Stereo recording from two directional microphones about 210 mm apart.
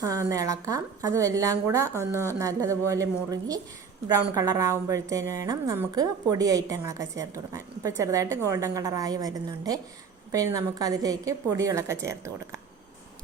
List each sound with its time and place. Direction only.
0.0 s a woman's voice: 15° right (ahead or behind)